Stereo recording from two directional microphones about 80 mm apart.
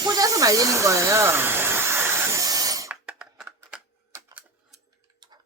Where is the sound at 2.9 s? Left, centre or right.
Centre.